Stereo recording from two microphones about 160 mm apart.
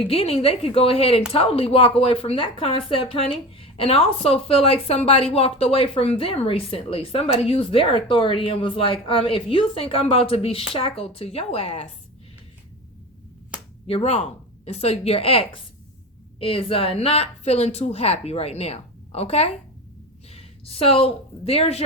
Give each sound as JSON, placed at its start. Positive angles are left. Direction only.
{"t": 0.1, "sound": "a woman's voice", "side_deg": 40}
{"t": 13.8, "sound": "a woman's voice", "side_deg": 40}